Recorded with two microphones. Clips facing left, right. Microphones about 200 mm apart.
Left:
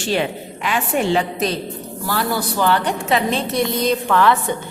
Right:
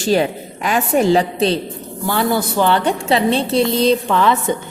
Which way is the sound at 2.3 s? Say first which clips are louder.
Right 1 dB; 20° right (ahead or behind).